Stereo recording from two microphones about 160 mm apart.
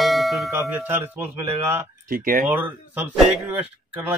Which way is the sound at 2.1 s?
60° right (ahead or behind).